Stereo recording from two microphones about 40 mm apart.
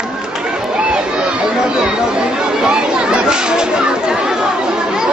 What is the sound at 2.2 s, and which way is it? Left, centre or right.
Speech, centre.